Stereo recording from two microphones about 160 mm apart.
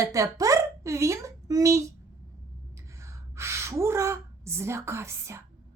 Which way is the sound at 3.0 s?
20° right (ahead or behind).